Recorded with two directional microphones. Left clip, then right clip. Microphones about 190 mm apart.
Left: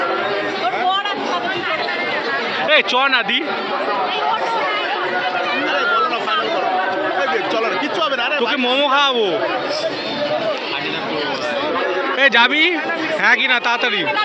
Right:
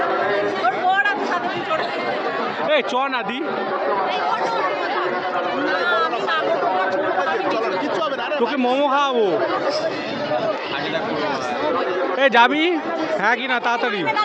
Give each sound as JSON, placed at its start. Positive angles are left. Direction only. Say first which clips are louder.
{"t": 2.6, "sound": "speech", "louder": "left 6 dB", "side_deg": -10}
{"t": 8.6, "sound": "speech", "louder": "left 3 dB", "side_deg": -20}
{"t": 12.2, "sound": "speech", "louder": "left 2 dB", "side_deg": -20}